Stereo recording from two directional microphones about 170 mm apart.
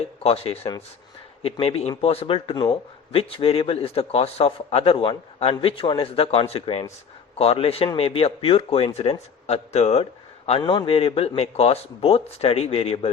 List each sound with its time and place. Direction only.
0.2 s a man's voice: 35° left (ahead or behind)